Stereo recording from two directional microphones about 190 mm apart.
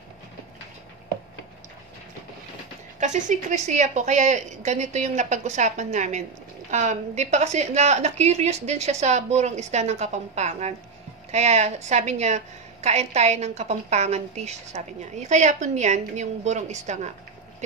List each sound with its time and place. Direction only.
3.0 s a woman's voice: 40° right (ahead or behind)